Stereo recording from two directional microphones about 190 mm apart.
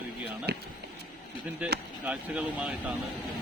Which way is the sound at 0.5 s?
60° right (ahead or behind).